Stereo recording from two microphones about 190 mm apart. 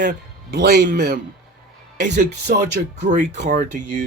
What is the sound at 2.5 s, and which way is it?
Speech, 45° right (ahead or behind).